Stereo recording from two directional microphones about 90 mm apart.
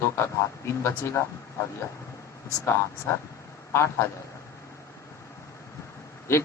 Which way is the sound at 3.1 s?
30° left (ahead or behind).